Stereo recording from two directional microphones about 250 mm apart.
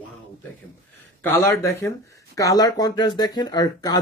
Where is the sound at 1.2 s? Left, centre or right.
Centre.